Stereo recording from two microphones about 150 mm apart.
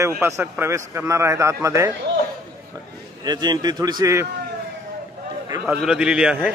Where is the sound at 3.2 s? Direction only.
30° right (ahead or behind).